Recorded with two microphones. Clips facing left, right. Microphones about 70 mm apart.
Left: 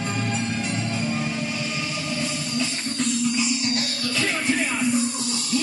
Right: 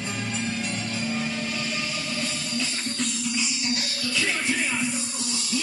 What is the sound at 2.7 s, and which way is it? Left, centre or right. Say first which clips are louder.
Music: left 3 dB; centre.